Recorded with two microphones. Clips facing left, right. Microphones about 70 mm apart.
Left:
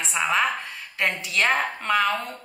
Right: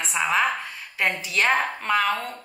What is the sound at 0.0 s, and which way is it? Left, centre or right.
A woman's voice, centre.